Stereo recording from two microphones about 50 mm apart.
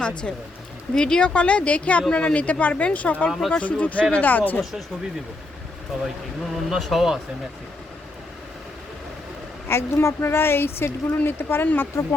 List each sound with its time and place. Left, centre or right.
0.0 s speech: centre
1.3 s speech: left
3.2 s speech: centre
3.6 s speech: left
6.5 s speech: centre
9.6 s a woman's voice: left